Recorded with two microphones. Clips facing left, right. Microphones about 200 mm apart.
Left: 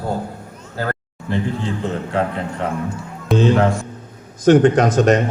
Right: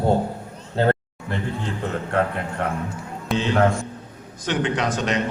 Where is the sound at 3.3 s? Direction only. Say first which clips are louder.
Left 5 dB; 45° left (ahead or behind).